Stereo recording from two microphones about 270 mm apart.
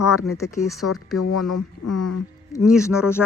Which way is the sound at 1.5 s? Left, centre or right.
Left.